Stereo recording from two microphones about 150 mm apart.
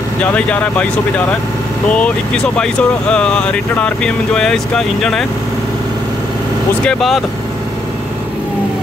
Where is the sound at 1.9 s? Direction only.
5° left (ahead or behind).